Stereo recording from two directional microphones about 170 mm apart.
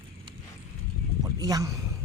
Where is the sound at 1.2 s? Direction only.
20° right (ahead or behind).